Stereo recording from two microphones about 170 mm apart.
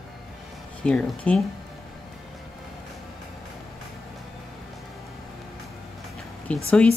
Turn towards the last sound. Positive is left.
turn(degrees=5)  # may be behind; listen again after turning